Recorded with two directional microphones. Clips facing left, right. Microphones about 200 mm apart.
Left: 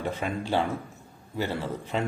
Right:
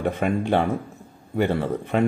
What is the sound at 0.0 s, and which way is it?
Speech, 55° right (ahead or behind).